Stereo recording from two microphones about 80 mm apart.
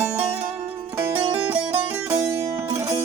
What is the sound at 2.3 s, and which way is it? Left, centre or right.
Music, right.